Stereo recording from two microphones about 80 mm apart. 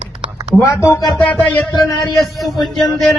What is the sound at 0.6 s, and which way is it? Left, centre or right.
Music, left.